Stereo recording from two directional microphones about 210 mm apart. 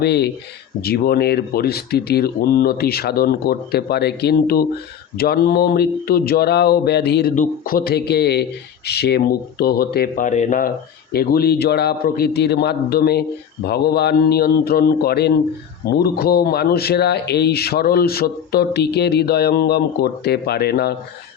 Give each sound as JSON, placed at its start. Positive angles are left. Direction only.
{"t": 0.0, "sound": "speech", "side_deg": 50}
{"t": 11.1, "sound": "speech", "side_deg": 45}